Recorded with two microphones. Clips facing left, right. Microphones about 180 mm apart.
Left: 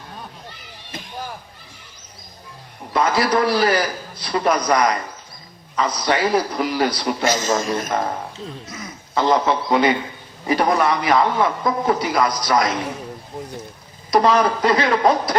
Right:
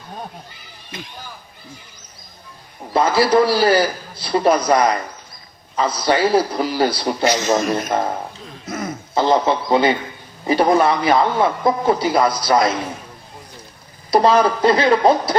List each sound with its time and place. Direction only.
2.9 s a man's voice: 30° right (ahead or behind)
8.6 s speech: 50° right (ahead or behind)
9.1 s a man's voice: 30° right (ahead or behind)
14.1 s a man's voice: 30° right (ahead or behind)